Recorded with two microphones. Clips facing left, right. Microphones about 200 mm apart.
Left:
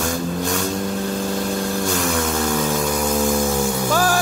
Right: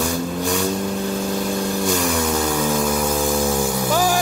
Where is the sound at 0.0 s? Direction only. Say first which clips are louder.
Right 1 dB; centre (ahead or behind).